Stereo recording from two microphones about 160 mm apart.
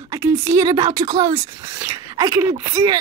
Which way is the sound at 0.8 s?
25° right (ahead or behind).